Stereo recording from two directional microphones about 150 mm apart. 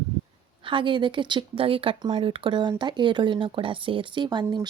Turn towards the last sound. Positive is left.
turn(degrees=-30)  # may be behind; listen again after turning